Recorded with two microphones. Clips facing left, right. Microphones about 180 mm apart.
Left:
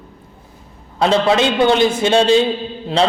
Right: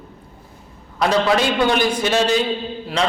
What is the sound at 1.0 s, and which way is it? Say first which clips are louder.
A man's voice: left 3 dB; 25° left (ahead or behind).